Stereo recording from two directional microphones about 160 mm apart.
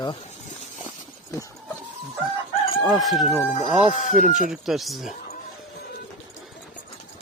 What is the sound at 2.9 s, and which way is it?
Speech, centre (ahead or behind).